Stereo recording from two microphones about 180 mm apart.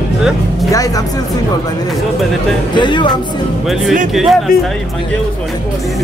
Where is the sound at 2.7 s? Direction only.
25° left (ahead or behind).